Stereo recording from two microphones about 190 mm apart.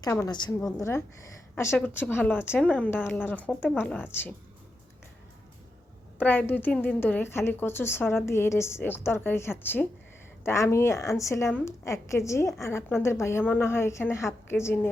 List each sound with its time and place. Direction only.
0.0 s a woman's voice: 15° left (ahead or behind)
6.1 s a woman's voice: 10° left (ahead or behind)